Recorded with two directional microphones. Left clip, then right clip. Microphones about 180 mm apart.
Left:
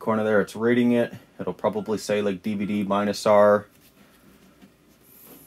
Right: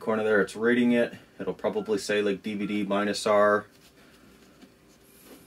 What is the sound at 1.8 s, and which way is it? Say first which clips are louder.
Speech: left 1 dB; 30° left (ahead or behind).